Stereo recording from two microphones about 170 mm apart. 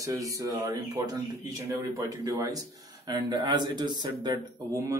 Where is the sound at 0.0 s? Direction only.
20° right (ahead or behind).